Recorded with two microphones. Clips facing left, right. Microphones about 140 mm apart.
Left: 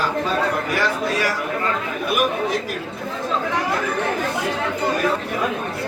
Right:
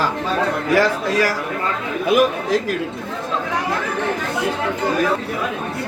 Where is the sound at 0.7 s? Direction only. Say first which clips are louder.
Right 5 dB; 90° right.